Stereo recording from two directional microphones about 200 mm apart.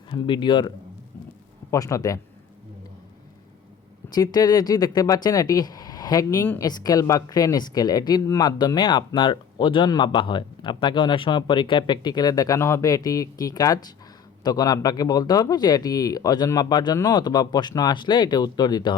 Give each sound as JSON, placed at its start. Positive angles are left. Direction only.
{"t": 0.1, "sound": "speech", "side_deg": 25}
{"t": 1.7, "sound": "a man's voice", "side_deg": 15}
{"t": 4.1, "sound": "speech", "side_deg": 20}